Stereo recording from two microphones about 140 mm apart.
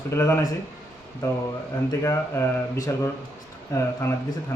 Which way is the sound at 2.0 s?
20° left (ahead or behind).